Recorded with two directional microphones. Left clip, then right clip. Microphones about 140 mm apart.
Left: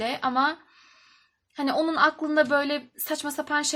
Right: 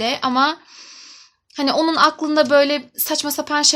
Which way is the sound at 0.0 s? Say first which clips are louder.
Right 7 dB; 30° right (ahead or behind).